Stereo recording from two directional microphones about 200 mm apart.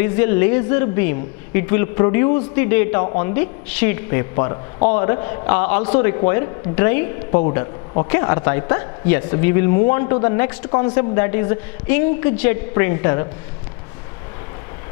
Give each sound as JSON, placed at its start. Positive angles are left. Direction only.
{"t": 0.0, "sound": "a man's voice", "side_deg": 15}